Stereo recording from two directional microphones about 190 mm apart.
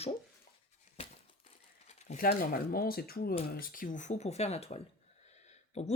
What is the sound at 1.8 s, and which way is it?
Crumpling, 40° left (ahead or behind).